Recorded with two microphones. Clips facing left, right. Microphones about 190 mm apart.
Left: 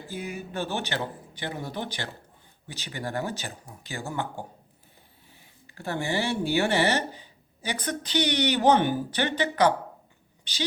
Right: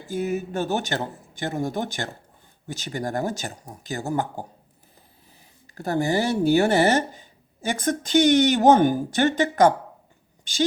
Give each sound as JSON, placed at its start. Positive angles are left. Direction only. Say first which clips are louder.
{"t": 0.1, "sound": "speech", "louder": "right 9 dB", "side_deg": -45}
{"t": 5.6, "sound": "speech", "louder": "right 7 dB", "side_deg": -40}